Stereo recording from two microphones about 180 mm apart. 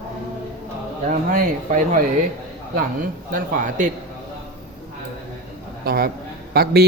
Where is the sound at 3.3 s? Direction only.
50° right (ahead or behind).